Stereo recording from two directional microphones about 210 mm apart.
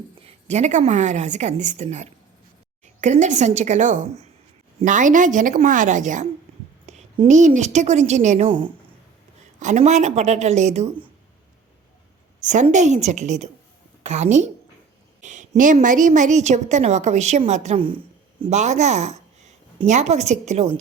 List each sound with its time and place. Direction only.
0.2 s a woman's voice: 30° right (ahead or behind)
9.6 s a woman's voice: 35° right (ahead or behind)
12.4 s a woman's voice: 35° right (ahead or behind)